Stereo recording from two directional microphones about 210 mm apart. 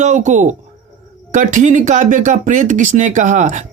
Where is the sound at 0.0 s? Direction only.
35° right (ahead or behind).